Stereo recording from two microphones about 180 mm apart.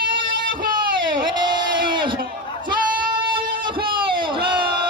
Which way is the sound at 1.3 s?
25° right (ahead or behind).